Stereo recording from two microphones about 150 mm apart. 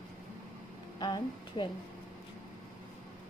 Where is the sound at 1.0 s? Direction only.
30° left (ahead or behind).